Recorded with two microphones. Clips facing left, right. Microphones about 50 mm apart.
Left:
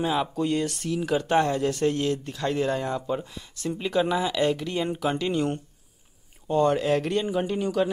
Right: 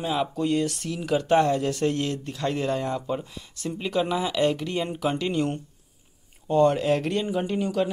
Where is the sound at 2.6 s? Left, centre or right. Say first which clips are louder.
Even; centre.